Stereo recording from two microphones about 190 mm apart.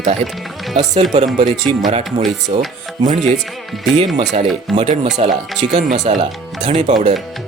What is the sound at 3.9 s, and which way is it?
Speech, 35° right (ahead or behind).